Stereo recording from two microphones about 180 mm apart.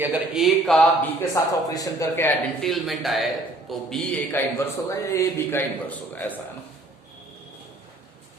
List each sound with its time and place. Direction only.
0.0 s speech: 5° right (ahead or behind)
1.2 s a man's voice: 20° left (ahead or behind)
2.6 s a man's voice: centre (ahead or behind)